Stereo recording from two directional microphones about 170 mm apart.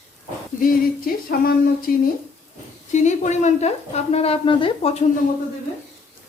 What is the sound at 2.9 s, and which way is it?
A woman's voice, 45° left (ahead or behind).